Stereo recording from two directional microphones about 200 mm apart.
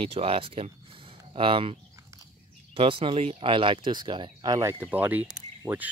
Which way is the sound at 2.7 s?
25° right (ahead or behind).